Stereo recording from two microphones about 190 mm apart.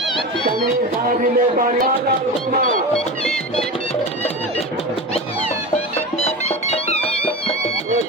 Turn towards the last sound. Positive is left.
turn(degrees=35)  # may be behind; listen again after turning